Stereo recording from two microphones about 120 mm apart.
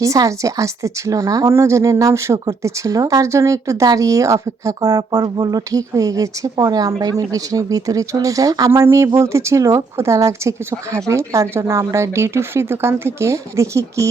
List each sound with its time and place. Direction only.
0.0 s a woman's voice: 25° right (ahead or behind)